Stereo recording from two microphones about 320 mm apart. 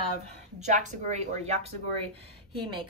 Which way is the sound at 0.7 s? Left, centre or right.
Right.